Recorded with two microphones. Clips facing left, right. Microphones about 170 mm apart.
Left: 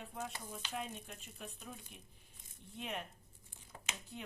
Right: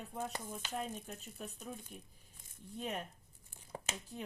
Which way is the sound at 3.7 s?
40° right (ahead or behind).